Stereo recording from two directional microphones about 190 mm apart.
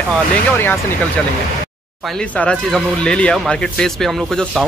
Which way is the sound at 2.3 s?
5° left (ahead or behind).